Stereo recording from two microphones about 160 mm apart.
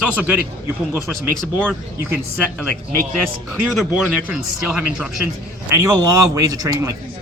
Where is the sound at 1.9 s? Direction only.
15° right (ahead or behind).